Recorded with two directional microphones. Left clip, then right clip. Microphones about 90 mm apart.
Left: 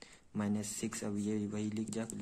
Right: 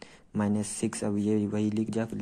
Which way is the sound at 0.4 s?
30° right (ahead or behind).